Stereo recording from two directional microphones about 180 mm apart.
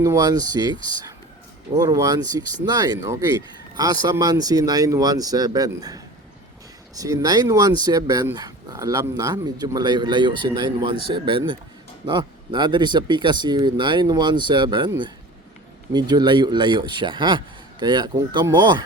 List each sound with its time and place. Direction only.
0.0 s speech: 20° right (ahead or behind)